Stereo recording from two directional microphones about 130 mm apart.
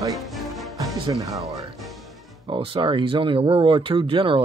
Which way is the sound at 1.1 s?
25° right (ahead or behind).